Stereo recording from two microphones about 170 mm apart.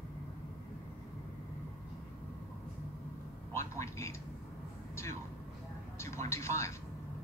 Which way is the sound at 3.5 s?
15° left (ahead or behind).